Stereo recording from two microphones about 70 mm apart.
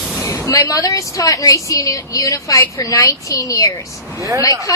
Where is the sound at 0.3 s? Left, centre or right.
Left.